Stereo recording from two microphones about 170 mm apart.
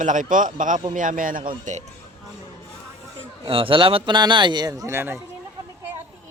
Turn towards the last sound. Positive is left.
turn(degrees=-15)  # may be behind; listen again after turning